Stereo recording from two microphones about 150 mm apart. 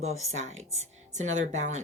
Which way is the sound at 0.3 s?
50° right (ahead or behind).